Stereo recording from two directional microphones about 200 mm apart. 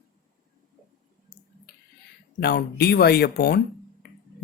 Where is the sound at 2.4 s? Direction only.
55° left (ahead or behind).